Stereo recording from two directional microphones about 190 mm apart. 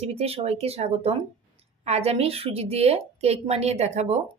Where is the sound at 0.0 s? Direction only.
30° right (ahead or behind).